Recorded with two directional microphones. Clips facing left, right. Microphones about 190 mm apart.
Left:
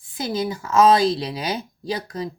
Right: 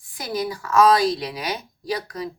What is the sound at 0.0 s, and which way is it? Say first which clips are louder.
Speech: left 2 dB; 25° left (ahead or behind).